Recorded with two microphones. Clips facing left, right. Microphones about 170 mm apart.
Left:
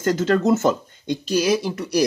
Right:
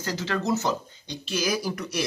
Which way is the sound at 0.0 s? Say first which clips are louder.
Left 10 dB; 50° left (ahead or behind).